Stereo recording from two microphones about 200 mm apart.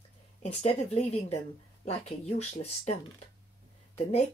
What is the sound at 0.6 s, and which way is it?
Speech, 35° left (ahead or behind).